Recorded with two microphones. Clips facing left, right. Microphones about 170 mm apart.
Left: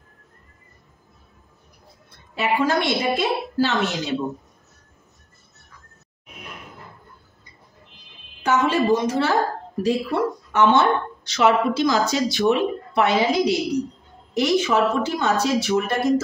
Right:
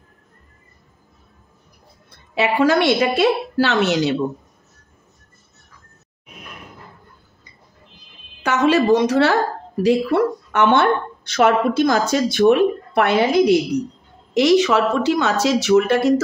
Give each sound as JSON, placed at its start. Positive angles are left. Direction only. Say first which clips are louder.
{"t": 2.3, "sound": "speech", "louder": "right 5 dB", "side_deg": -85}
{"t": 8.4, "sound": "a woman's voice", "louder": "right 3 dB", "side_deg": -85}
{"t": 9.8, "sound": "speech", "louder": "right 5 dB", "side_deg": -65}
{"t": 14.3, "sound": "speech", "louder": "right 5 dB", "side_deg": -85}